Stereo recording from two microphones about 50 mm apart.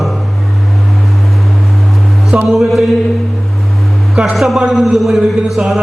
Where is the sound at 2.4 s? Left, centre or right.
Centre.